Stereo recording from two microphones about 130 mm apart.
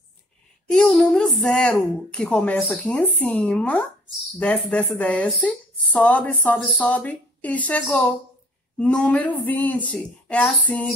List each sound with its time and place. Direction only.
0.7 s speech: 5° left (ahead or behind)